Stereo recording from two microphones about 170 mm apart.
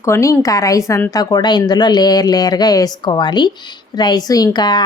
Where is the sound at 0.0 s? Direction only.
15° left (ahead or behind).